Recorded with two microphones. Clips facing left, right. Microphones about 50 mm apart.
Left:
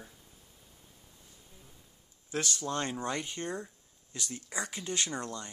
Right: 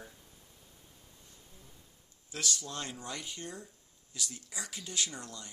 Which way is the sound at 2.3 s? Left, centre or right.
Left.